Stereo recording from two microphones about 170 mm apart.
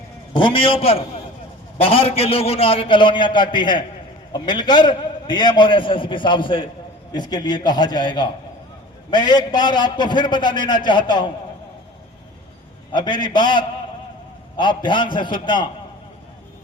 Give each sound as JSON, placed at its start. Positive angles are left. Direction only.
{"t": 0.3, "sound": "a man's voice", "side_deg": 30}
{"t": 12.9, "sound": "a man's voice", "side_deg": 25}